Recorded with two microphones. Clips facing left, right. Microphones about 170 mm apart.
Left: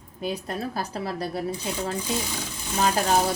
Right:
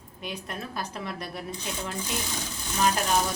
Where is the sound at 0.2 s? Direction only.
35° left (ahead or behind).